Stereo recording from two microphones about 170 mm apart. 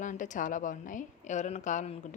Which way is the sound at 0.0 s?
50° left (ahead or behind).